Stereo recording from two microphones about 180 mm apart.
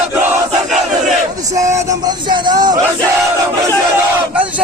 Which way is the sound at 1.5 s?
20° right (ahead or behind).